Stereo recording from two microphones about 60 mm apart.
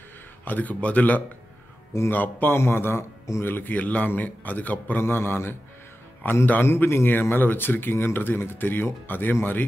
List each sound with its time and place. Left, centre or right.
0.5 s a man's voice: left
3.4 s a man's voice: left
5.0 s a man's voice: left